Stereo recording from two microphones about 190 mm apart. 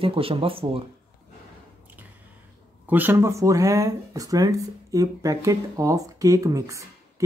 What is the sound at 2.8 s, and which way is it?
Speech, 10° right (ahead or behind).